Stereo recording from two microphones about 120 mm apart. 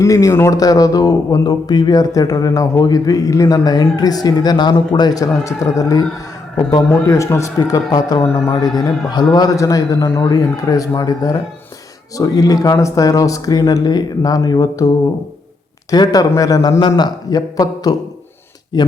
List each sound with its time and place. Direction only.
0.0 s speech: 25° left (ahead or behind)
7.1 s speech: 25° left (ahead or behind)
15.9 s speech: 30° left (ahead or behind)